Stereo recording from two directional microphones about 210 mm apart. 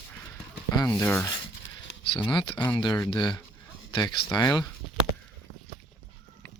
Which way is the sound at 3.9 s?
20° left (ahead or behind).